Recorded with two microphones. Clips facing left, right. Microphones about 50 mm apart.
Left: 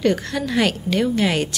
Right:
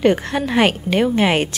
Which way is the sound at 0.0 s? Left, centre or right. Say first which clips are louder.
Right 4 dB; right.